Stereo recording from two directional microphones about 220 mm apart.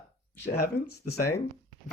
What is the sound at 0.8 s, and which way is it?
Speech, 90° left.